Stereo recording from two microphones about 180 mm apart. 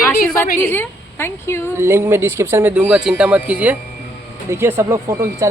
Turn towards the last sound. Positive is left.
turn(degrees=-15)  # may be behind; listen again after turning